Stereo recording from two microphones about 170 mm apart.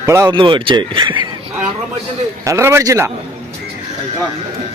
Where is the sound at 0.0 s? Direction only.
15° right (ahead or behind).